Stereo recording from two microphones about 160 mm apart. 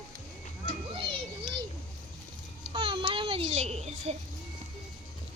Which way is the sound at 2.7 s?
35° right (ahead or behind).